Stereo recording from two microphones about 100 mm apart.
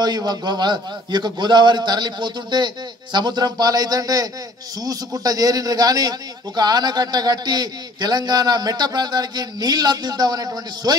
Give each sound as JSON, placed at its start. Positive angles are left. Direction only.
{"t": 0.0, "sound": "a man's voice", "side_deg": -40}